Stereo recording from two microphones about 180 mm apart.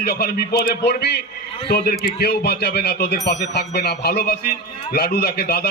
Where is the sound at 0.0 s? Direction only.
60° left (ahead or behind).